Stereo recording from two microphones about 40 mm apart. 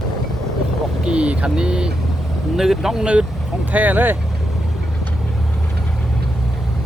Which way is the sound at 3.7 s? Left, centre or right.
Right.